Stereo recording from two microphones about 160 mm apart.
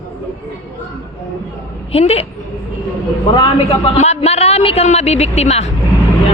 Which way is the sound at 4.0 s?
40° left (ahead or behind).